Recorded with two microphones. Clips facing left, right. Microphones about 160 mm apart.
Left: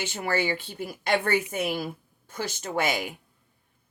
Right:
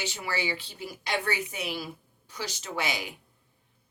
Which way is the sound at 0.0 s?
50° left (ahead or behind).